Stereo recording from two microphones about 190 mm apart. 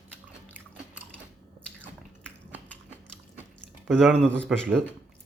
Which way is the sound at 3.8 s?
Centre (ahead or behind).